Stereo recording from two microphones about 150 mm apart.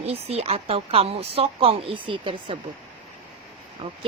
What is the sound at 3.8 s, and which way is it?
Speech, 40° right (ahead or behind).